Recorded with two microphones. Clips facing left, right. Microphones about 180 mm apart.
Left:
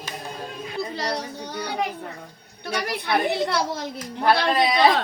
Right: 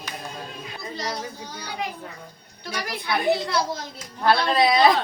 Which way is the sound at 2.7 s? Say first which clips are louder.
Left 3 dB; 60° left (ahead or behind).